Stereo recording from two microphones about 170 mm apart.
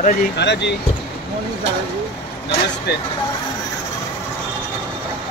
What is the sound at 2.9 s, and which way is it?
Speech, 75° left (ahead or behind).